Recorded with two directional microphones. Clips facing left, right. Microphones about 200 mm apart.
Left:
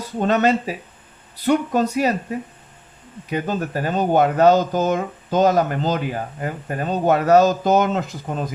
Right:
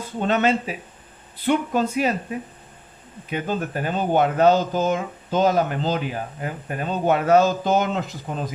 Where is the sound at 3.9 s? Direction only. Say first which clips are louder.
Left 3 dB; 40° left (ahead or behind).